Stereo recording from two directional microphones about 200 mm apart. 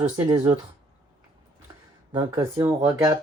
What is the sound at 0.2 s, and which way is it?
Speech, 20° right (ahead or behind).